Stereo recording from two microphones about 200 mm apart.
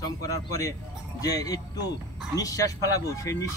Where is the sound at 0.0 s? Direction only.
15° left (ahead or behind).